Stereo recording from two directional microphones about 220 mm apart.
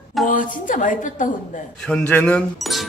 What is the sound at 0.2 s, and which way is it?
Speech, centre (ahead or behind).